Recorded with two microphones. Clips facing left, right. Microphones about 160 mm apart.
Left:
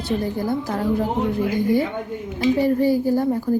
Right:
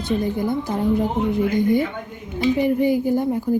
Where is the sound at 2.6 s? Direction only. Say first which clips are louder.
Even; 15° right (ahead or behind).